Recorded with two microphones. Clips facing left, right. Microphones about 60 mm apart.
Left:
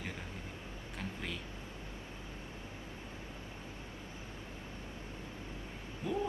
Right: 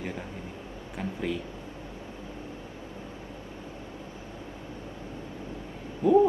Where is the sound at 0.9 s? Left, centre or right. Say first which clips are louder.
Right 11 dB; centre.